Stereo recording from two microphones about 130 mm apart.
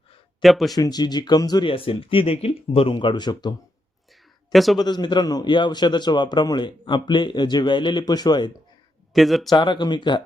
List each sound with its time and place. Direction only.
0.4 s speech: centre (ahead or behind)
0.8 s a man's voice: 30° left (ahead or behind)
1.7 s speech: 45° left (ahead or behind)
4.5 s speech: centre (ahead or behind)
4.8 s a man's voice: 35° left (ahead or behind)
9.1 s speech: centre (ahead or behind)
9.5 s a man's voice: 35° left (ahead or behind)